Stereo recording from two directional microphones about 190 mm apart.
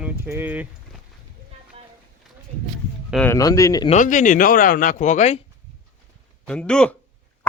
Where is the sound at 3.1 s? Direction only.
5° left (ahead or behind).